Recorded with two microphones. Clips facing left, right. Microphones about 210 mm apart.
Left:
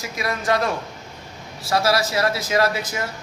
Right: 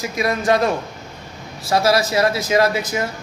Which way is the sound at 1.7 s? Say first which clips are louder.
Right 3 dB; 20° right (ahead or behind).